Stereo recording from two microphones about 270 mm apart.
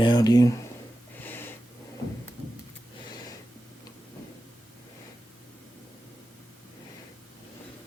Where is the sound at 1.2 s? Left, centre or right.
Centre.